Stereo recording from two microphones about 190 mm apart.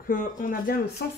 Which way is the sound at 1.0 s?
65° left (ahead or behind).